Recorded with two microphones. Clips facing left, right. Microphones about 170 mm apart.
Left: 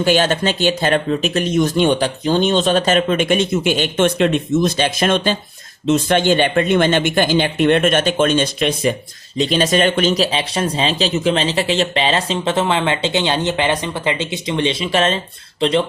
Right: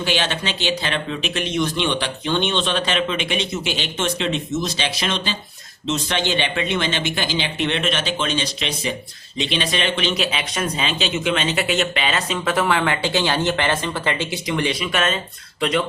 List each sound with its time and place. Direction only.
0.0 s speech: 45° left (ahead or behind); by 15.8 s 30° left (ahead or behind)